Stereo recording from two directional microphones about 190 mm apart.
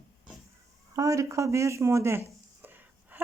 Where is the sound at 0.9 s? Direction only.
15° right (ahead or behind).